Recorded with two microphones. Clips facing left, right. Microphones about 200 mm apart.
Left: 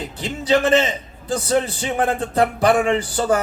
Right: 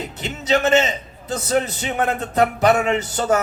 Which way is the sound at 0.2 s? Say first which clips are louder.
Left 2 dB; 30° left (ahead or behind).